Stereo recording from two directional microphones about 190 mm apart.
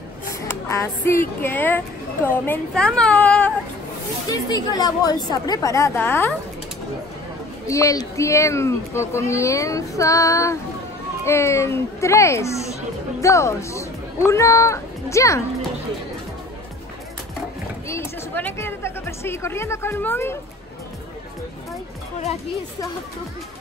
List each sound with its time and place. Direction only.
0.3 s speech: 15° left (ahead or behind)
4.3 s speech: 20° left (ahead or behind)
7.6 s speech: 15° left (ahead or behind)
17.8 s speech: 15° left (ahead or behind)